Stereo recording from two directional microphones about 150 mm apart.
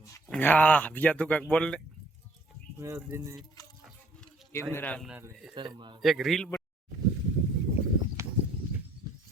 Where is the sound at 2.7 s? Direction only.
20° right (ahead or behind).